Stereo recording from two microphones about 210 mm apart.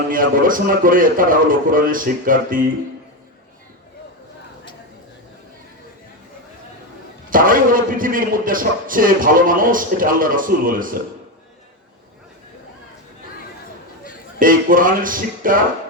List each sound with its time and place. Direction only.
0.1 s a man's voice: 40° right (ahead or behind)
7.3 s a man's voice: 40° right (ahead or behind)
14.3 s a man's voice: 40° right (ahead or behind)